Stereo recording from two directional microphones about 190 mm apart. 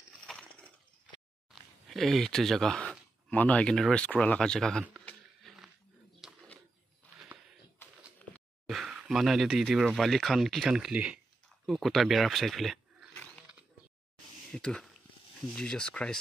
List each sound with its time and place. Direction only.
0.3 s a sound: 5° left (ahead or behind)
8.6 s speech: centre (ahead or behind)
14.5 s speech: 5° left (ahead or behind)